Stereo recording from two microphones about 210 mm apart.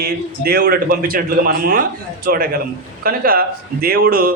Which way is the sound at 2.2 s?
45° right (ahead or behind).